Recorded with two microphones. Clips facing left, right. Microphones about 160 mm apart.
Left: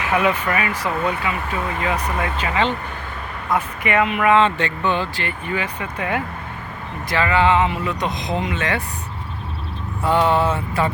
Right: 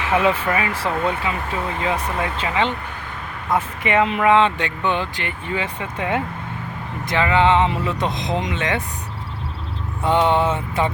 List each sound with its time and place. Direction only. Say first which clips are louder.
0.0 s speech: right 1 dB; 30° right (ahead or behind)
10.0 s speech: even; 20° right (ahead or behind)